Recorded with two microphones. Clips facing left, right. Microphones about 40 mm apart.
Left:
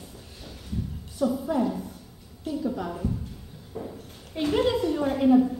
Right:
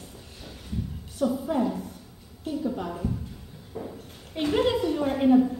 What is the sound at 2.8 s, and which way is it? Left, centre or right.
Speech, centre.